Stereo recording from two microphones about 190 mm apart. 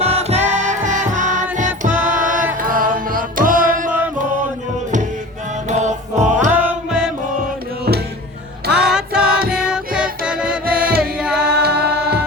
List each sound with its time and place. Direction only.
0.0 s music: 35° right (ahead or behind)
5.6 s music: 40° right (ahead or behind)
6.5 s music: 10° right (ahead or behind)
8.7 s music: 5° right (ahead or behind)
10.7 s music: 50° right (ahead or behind)
11.2 s singing: 5° right (ahead or behind)
11.6 s music: 60° right (ahead or behind)